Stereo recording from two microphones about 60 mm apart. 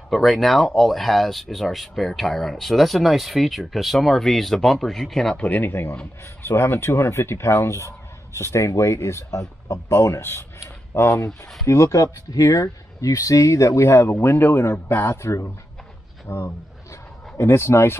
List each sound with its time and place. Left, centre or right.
0.1 s speech: centre
5.4 s speech: left
5.7 s speech: left
11.6 s speech: left
14.1 s speech: left
16.3 s speech: left
17.4 s speech: left